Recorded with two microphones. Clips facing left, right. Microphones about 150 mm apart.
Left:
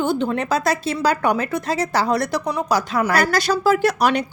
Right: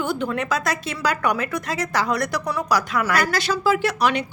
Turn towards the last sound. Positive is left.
turn(degrees=40)  # may be behind; listen again after turning